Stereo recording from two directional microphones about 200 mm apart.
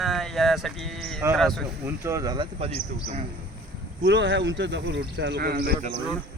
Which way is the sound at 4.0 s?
65° right (ahead or behind).